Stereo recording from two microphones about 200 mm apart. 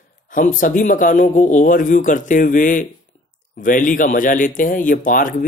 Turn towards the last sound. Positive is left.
turn(degrees=40)  # may be behind; listen again after turning